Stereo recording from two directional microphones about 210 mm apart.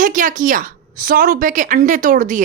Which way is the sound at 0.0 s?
40° right (ahead or behind).